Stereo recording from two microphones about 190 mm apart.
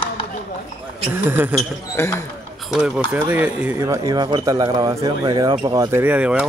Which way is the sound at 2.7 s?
5° right (ahead or behind).